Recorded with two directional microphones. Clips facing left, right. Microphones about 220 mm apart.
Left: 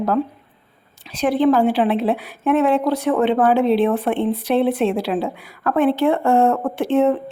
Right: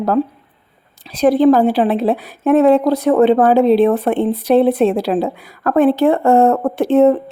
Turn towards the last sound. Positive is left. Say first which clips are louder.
# right 5 dB
turn(degrees=-40)  # may be behind; listen again after turning